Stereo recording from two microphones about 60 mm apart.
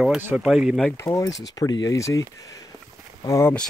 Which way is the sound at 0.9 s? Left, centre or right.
Left.